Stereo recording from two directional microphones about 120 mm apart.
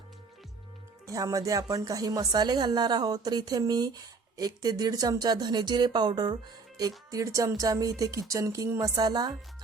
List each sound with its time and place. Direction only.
1.0 s a woman's voice: 30° right (ahead or behind)